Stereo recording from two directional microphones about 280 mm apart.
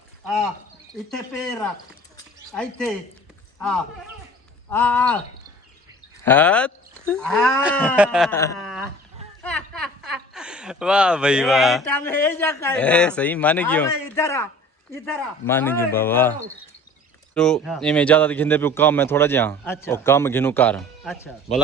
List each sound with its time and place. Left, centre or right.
0.3 s speech: centre
4.7 s speech: centre
6.2 s speech: centre
9.4 s speech: centre
17.3 s speech: centre